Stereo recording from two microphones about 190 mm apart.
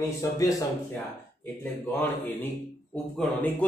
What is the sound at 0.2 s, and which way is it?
Speech, 20° left (ahead or behind).